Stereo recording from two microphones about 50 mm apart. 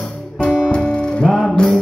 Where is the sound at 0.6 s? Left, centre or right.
Left.